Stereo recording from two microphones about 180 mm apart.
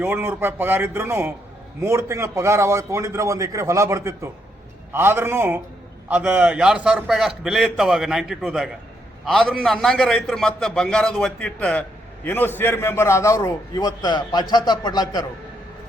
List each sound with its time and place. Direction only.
0.0 s a man's voice: 10° right (ahead or behind); by 15.2 s 20° left (ahead or behind)